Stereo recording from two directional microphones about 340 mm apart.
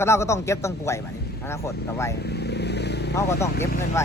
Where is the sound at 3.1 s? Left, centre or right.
Centre.